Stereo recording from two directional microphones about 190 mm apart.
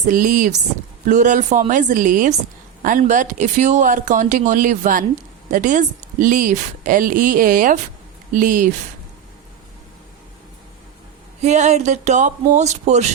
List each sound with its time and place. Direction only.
0.0 s a woman's voice: 45° right (ahead or behind)
11.4 s speech: 35° right (ahead or behind)